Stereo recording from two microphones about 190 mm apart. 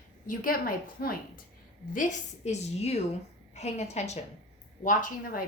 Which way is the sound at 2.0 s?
40° left (ahead or behind).